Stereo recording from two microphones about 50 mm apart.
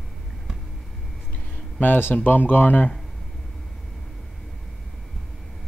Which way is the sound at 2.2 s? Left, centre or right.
Left.